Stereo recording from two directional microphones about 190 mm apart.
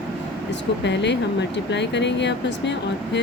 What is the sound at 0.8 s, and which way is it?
Speech, 65° left (ahead or behind).